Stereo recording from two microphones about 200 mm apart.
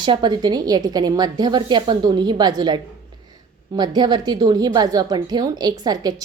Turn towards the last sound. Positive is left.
turn(degrees=-20)  # may be behind; listen again after turning